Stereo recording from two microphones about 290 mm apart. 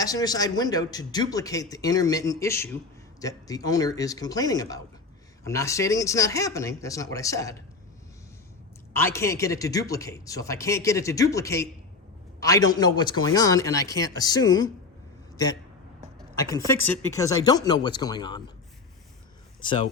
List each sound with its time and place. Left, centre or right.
0.0 s a man's voice: centre
8.9 s a man's voice: centre
16.5 s a man's voice: centre
19.6 s a man's voice: centre